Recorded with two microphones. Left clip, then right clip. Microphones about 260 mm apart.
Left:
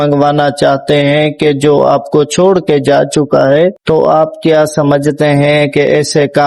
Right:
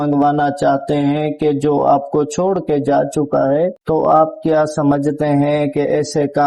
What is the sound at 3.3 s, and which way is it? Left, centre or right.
Speech, left.